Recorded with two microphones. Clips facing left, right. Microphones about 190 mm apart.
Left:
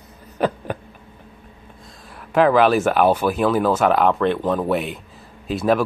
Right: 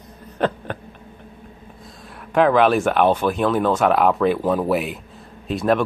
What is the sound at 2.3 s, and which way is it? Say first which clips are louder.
Speech: even; centre (ahead or behind).